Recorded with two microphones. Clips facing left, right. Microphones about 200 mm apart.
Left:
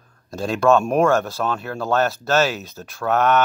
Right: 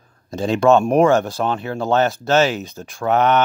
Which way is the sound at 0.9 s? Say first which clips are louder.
Right 3 dB; centre (ahead or behind).